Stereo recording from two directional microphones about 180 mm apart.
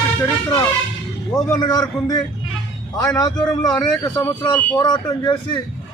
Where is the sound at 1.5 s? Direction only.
20° left (ahead or behind).